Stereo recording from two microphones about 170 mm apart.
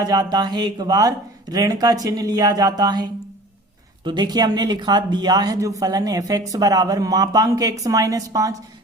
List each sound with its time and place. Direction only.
0.0 s speech: 20° right (ahead or behind)